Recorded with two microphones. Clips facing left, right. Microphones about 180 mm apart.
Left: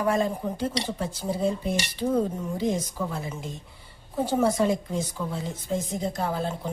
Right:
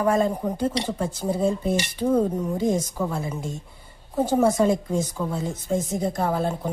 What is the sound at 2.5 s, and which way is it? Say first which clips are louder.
A woman's voice: right 4 dB; 45° right (ahead or behind).